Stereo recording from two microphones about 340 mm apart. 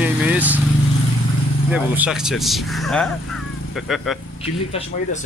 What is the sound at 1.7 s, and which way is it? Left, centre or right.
A man's voice, centre.